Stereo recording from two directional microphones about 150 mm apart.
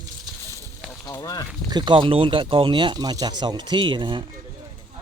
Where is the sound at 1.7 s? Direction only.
30° right (ahead or behind).